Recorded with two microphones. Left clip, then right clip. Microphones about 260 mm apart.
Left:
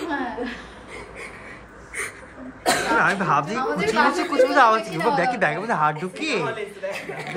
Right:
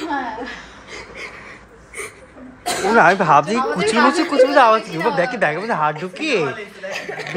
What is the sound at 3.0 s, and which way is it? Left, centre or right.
A woman's voice, centre.